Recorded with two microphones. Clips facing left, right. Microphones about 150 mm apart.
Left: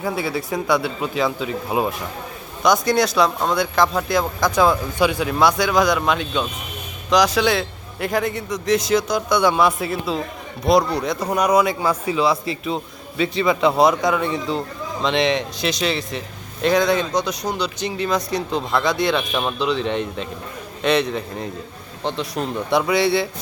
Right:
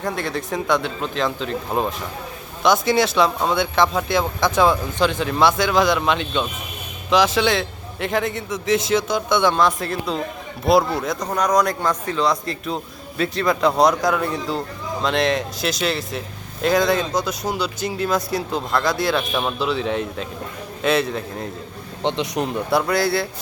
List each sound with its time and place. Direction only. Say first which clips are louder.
0.0 s speech: left 1 dB; 5° left (ahead or behind)
11.3 s speech: left 2 dB; 10° left (ahead or behind)
22.0 s speech: right 2 dB; 20° right (ahead or behind)
22.5 s speech: left 2 dB; centre (ahead or behind)